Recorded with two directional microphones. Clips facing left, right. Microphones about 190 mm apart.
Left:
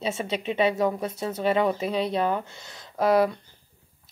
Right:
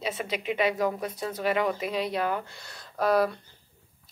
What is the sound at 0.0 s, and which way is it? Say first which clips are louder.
Speech: left 3 dB; 25° left (ahead or behind).